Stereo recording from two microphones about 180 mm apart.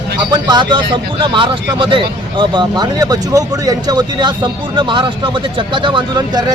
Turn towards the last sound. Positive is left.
turn(degrees=-25)  # may be behind; listen again after turning